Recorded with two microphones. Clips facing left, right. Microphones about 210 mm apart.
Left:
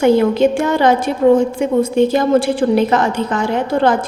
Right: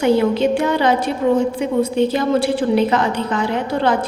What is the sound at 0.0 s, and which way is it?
A woman's voice, 50° left (ahead or behind).